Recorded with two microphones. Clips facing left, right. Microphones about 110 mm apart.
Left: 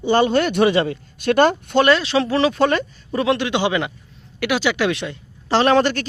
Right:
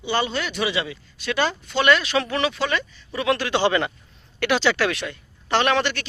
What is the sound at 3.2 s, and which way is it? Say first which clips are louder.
A woman's voice: left 1 dB; 20° left (ahead or behind).